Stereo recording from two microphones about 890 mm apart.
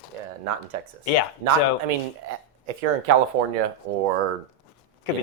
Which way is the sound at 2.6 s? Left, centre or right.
Right.